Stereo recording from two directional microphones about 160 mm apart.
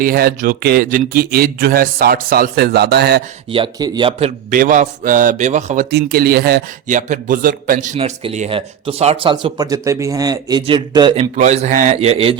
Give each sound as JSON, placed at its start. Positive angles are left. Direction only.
{"t": 0.0, "sound": "speech", "side_deg": -65}
{"t": 3.5, "sound": "speech", "side_deg": -30}
{"t": 4.5, "sound": "a man's voice", "side_deg": -55}
{"t": 6.8, "sound": "a man's voice", "side_deg": -50}
{"t": 7.9, "sound": "speech", "side_deg": -40}
{"t": 11.2, "sound": "a man's voice", "side_deg": -45}
{"t": 11.9, "sound": "speech", "side_deg": -40}